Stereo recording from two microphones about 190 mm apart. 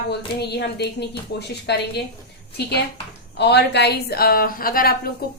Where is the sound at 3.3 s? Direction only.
60° left (ahead or behind).